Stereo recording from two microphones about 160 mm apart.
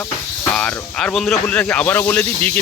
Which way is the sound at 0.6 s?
5° left (ahead or behind).